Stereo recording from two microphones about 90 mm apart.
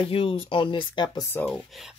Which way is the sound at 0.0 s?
85° left.